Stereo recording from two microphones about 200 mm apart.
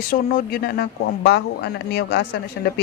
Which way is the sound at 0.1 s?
45° left (ahead or behind).